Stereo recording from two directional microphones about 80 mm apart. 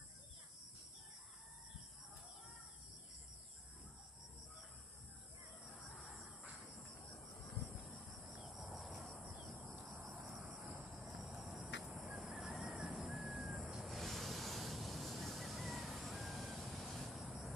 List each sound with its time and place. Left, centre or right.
8.2 s cricket: centre
9.6 s a sound: right
10.0 s cricket: centre
10.6 s cricket: centre
10.9 s cricket: centre
12.1 s a sound: centre
13.5 s vehicle: centre